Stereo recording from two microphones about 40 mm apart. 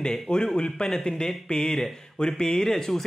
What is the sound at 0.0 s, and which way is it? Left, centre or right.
Speech, centre.